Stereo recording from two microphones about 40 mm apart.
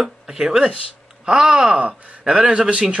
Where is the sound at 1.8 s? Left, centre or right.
Right.